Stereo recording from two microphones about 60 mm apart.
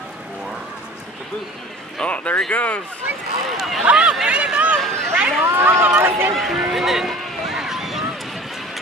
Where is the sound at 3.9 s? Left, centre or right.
Right.